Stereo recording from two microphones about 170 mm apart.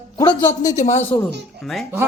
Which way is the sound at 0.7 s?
45° left (ahead or behind).